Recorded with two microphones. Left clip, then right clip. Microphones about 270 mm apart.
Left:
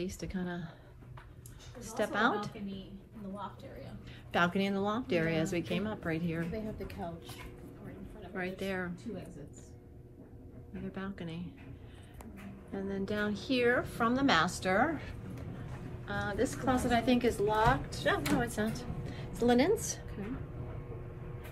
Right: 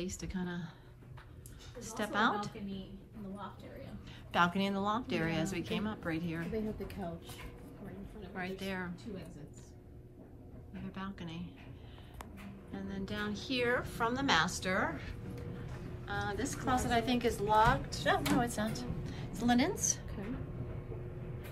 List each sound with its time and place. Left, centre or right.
0.0 s a woman's voice: centre
1.8 s a woman's voice: centre
4.3 s a woman's voice: centre
6.5 s a woman's voice: centre
8.4 s a woman's voice: centre
10.9 s a woman's voice: centre
12.7 s a woman's voice: centre
18.8 s music: centre
19.7 s a woman's voice: right